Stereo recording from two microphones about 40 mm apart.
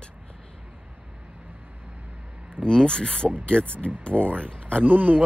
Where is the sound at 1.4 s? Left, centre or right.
Right.